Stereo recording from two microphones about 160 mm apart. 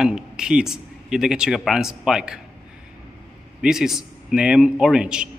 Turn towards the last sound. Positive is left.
turn(degrees=-5)  # may be behind; listen again after turning